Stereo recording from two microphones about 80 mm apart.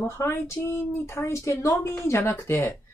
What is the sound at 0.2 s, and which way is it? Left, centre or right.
Speech, left.